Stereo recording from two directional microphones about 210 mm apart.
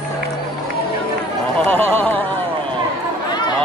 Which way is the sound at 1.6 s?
10° left (ahead or behind).